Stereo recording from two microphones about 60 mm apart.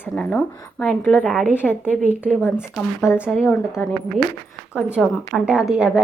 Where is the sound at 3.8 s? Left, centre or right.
Left.